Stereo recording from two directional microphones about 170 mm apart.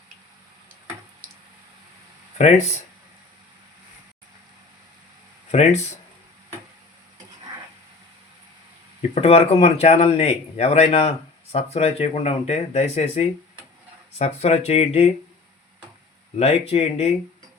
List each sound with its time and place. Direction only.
5.5 s speech: 40° left (ahead or behind)
9.0 s speech: 35° left (ahead or behind)
16.4 s speech: 40° left (ahead or behind)